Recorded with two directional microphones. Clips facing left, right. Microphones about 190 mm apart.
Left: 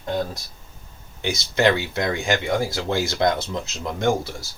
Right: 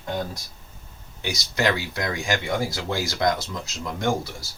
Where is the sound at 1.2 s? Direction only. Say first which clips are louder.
Left 5 dB; 25° left (ahead or behind).